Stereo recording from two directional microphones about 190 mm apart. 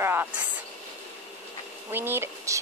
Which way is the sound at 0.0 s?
10° right (ahead or behind).